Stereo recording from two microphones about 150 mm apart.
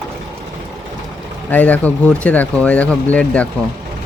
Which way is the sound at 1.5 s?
10° left (ahead or behind).